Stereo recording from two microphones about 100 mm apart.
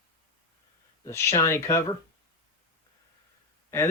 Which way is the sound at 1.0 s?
30° left (ahead or behind).